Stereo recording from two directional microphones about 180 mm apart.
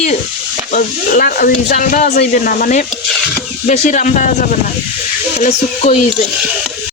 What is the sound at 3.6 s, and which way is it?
Speech, 45° left (ahead or behind).